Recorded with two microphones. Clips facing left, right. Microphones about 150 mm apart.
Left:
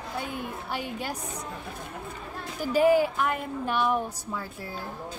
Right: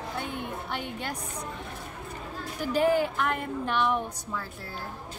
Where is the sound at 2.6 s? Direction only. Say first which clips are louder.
Left 3 dB; 10° left (ahead or behind).